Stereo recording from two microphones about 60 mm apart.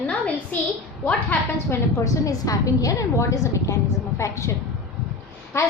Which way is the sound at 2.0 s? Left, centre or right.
Left.